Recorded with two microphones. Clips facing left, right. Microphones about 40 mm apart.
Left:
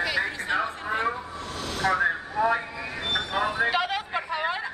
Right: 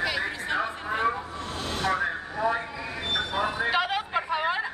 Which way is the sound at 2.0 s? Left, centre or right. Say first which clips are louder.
Left 4 dB; left.